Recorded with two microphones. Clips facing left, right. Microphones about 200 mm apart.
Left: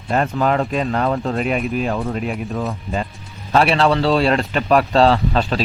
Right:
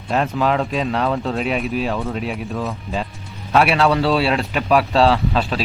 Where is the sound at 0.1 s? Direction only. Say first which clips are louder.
Left 1 dB; centre (ahead or behind).